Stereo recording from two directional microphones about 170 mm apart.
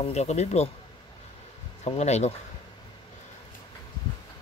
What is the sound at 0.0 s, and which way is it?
Speech, 40° left (ahead or behind).